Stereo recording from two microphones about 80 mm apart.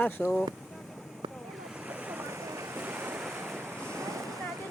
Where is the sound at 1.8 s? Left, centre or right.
Centre.